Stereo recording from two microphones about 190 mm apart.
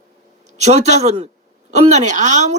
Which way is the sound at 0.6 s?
35° right (ahead or behind).